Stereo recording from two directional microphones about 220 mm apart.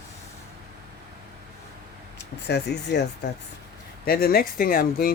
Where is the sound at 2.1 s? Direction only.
50° left (ahead or behind).